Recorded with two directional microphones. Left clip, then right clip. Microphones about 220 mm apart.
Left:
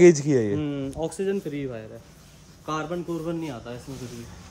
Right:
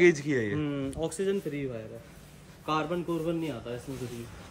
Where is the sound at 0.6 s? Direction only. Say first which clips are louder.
Left 3 dB; centre (ahead or behind).